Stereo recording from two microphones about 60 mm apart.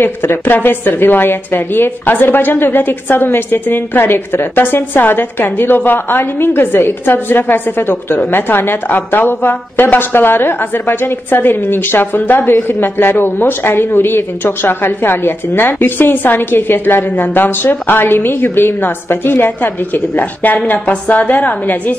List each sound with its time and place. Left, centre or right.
0.0 s a woman's voice: left